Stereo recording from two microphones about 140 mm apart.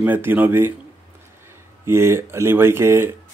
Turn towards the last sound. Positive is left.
turn(degrees=-20)  # may be behind; listen again after turning